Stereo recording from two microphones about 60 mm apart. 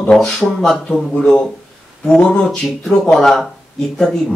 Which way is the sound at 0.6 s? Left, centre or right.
Centre.